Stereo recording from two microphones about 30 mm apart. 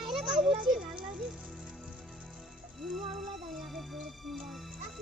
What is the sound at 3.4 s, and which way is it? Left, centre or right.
Music, centre.